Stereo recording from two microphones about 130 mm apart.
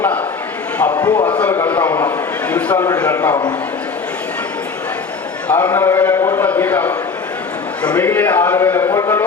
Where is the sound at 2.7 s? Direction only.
25° left (ahead or behind).